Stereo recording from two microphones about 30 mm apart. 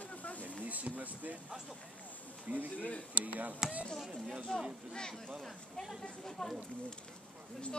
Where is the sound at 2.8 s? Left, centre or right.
Left.